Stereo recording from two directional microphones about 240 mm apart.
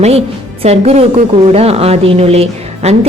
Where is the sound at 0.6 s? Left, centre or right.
Right.